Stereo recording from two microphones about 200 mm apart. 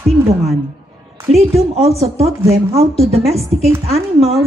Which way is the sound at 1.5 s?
30° right (ahead or behind).